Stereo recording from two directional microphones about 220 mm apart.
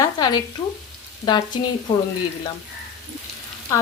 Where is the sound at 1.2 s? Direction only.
20° left (ahead or behind).